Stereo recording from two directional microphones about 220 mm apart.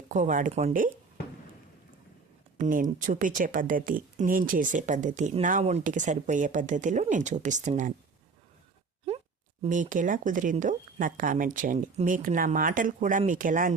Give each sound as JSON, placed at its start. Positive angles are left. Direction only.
{"t": 0.1, "sound": "speech", "side_deg": -35}
{"t": 2.6, "sound": "speech", "side_deg": -35}
{"t": 9.6, "sound": "speech", "side_deg": -35}